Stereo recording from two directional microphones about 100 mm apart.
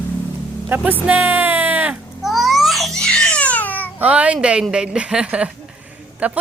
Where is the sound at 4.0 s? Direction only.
15° right (ahead or behind).